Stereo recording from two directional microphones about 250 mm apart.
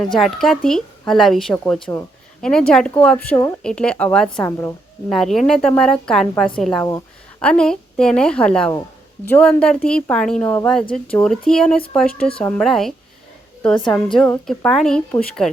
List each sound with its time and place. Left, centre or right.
0.1 s a woman's voice: centre
6.8 s a woman's voice: centre
13.7 s a woman's voice: centre
14.1 s a woman's voice: centre